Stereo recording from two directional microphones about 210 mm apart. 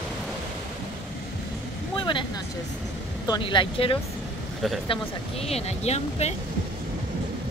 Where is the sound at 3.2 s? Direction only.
20° left (ahead or behind).